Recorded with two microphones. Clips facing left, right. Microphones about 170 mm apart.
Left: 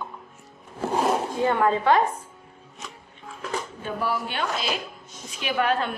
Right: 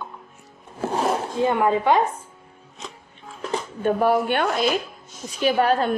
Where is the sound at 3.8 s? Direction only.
50° right (ahead or behind).